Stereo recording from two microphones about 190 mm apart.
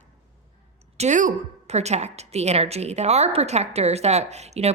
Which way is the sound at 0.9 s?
40° right (ahead or behind).